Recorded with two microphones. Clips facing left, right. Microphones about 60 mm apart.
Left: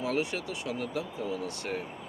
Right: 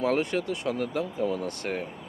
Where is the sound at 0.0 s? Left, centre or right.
Right.